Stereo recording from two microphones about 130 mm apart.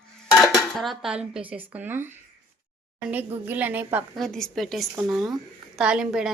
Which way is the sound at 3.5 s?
15° right (ahead or behind).